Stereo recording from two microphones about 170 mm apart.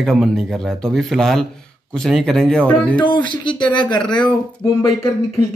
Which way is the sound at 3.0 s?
25° left (ahead or behind).